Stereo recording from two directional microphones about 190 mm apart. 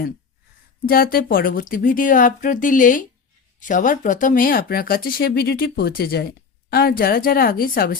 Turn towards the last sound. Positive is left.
turn(degrees=50)  # may be behind; listen again after turning